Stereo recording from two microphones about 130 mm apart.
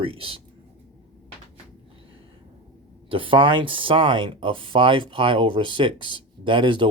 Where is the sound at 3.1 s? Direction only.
40° right (ahead or behind).